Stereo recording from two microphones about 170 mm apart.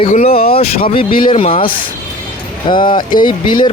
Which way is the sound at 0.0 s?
40° left (ahead or behind).